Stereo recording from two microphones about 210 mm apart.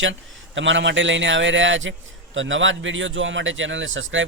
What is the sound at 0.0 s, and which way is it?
A man's voice, 60° right (ahead or behind).